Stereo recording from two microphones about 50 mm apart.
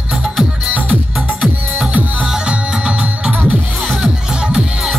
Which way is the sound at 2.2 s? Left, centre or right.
Centre.